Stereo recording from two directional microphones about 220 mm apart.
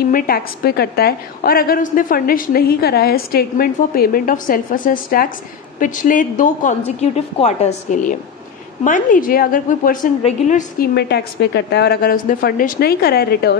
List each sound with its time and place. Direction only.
0.1 s a woman's voice: 45° left (ahead or behind)
11.0 s a woman's voice: 50° left (ahead or behind)